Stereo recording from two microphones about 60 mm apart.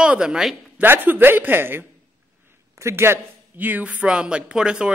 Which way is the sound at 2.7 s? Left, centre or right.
Right.